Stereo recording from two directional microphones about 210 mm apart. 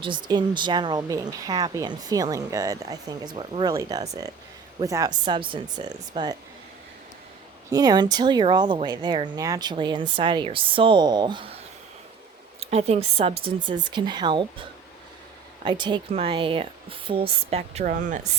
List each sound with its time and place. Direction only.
0.0 s speech: 20° right (ahead or behind)
7.7 s speech: 20° right (ahead or behind)
12.5 s speech: 30° right (ahead or behind)
15.6 s speech: 20° right (ahead or behind)